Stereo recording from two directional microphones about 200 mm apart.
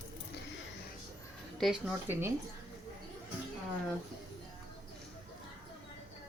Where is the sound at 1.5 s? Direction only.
Centre (ahead or behind).